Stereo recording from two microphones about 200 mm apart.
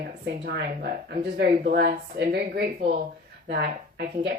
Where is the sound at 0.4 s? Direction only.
55° right (ahead or behind).